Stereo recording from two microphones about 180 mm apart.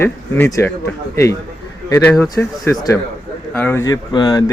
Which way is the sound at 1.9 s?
10° left (ahead or behind).